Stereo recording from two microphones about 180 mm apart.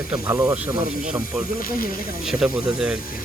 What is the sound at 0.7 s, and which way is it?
Speech, 40° right (ahead or behind).